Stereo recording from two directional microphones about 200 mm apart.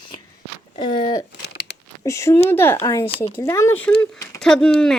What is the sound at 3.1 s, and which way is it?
Speech, 30° left (ahead or behind).